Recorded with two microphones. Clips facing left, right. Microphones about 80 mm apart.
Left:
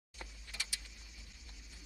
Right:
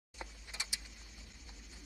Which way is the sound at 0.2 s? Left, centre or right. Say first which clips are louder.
Right 1 dB; right.